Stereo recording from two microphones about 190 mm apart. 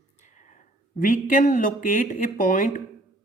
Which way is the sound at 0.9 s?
45° left (ahead or behind).